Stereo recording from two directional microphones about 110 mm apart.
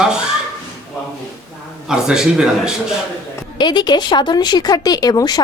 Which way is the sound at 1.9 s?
5° right (ahead or behind).